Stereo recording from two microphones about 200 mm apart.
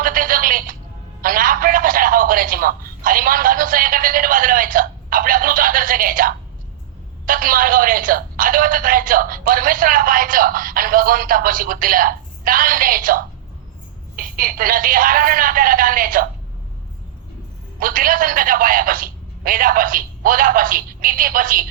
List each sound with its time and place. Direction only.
0.0 s telephone: 45° right (ahead or behind)
1.2 s a man's voice: 45° right (ahead or behind)
17.7 s speech: 45° right (ahead or behind)